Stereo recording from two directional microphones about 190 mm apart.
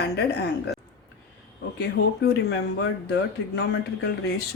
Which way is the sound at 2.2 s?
60° left (ahead or behind).